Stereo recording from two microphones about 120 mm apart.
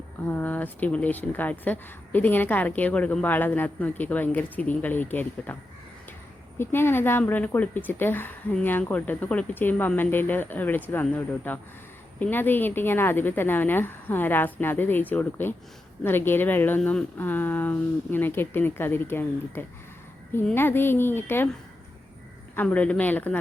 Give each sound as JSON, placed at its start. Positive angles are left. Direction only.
{"t": 0.3, "sound": "speech", "side_deg": 15}
{"t": 6.6, "sound": "speech", "side_deg": 20}
{"t": 22.5, "sound": "speech", "side_deg": 10}